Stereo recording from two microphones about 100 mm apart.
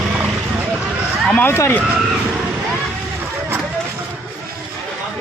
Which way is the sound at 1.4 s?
25° left (ahead or behind).